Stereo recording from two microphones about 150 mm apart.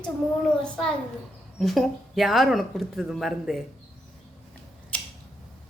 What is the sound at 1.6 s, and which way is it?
Speech, centre (ahead or behind).